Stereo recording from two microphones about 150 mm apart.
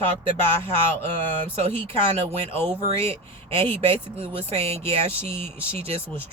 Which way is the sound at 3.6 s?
40° right (ahead or behind).